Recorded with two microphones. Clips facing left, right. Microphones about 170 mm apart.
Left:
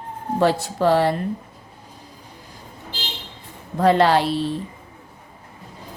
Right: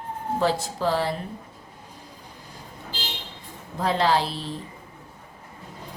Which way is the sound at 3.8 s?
60° left (ahead or behind).